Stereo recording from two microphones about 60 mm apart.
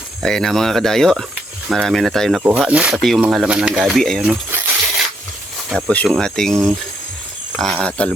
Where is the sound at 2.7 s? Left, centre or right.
Centre.